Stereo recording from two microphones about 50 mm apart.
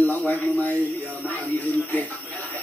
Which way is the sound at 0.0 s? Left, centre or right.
Left.